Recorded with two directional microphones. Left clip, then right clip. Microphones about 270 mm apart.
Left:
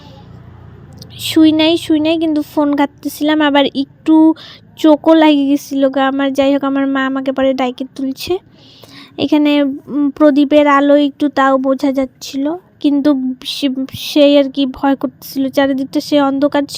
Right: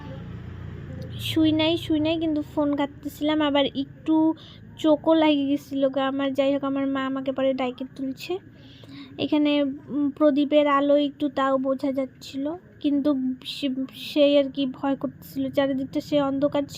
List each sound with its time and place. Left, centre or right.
1.2 s a woman's voice: left